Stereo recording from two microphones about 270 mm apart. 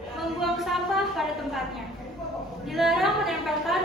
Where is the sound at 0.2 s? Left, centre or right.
Centre.